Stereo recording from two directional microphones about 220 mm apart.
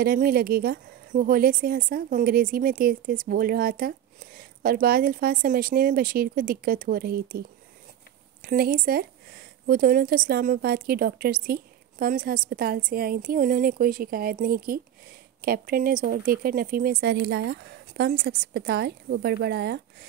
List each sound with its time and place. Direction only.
0.0 s a woman's voice: 45° right (ahead or behind)